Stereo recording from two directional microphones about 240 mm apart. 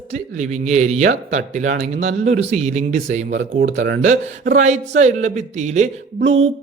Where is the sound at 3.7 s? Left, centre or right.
Right.